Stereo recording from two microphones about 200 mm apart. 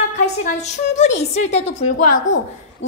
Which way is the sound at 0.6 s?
35° left (ahead or behind).